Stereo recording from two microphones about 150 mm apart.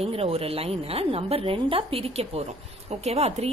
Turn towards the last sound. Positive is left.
turn(degrees=-45)  # may be behind; listen again after turning